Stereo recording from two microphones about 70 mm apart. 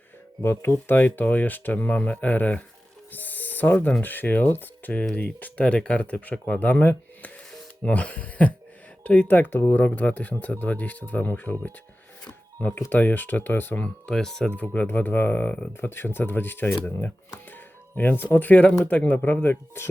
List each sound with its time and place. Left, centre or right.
0.4 s speech: left
0.9 s speech: left
14.1 s speech: centre
14.5 s speech: centre